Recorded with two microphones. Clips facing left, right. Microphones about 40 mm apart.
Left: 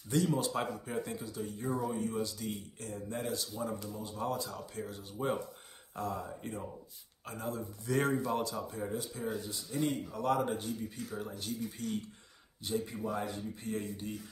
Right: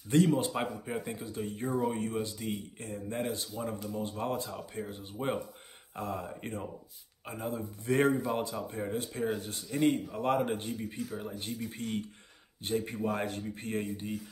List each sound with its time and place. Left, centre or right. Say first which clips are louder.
0.3 s speech: right 3 dB; right
3.9 s speech: right 3 dB; right
7.2 s speech: right 2 dB; right
7.8 s speech: right 4 dB; right
8.9 s speech: right 6 dB; right
11.1 s speech: right 1 dB; centre
11.3 s speech: right 1 dB; right
13.9 s speech: right 3 dB; centre